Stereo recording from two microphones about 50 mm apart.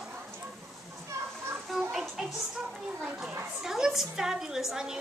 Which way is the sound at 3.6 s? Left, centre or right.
Centre.